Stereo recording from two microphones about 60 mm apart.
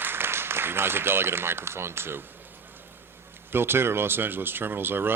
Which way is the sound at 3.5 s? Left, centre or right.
Right.